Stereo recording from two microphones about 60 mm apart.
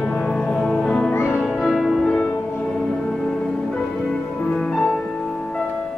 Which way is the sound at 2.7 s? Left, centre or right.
Centre.